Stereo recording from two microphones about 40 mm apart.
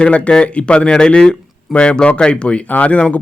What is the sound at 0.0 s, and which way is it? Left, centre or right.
A man's voice, left.